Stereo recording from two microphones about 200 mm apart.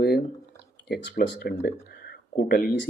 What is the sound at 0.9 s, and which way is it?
Speech, 55° left (ahead or behind).